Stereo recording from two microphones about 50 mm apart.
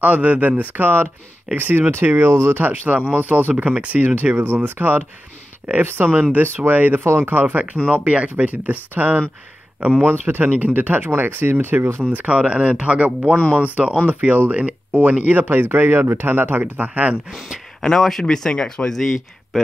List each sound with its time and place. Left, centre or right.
0.0 s speech: right
2.3 s speech: right
2.6 s speech: right
12.1 s speech: right
17.3 s speech: centre
17.8 s speech: centre